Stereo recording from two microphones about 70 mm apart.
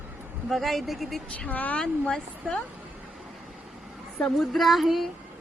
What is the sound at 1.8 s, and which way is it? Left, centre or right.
Speech, centre.